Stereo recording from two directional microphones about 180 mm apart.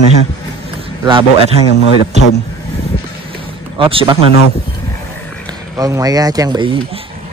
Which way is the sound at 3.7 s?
30° right (ahead or behind).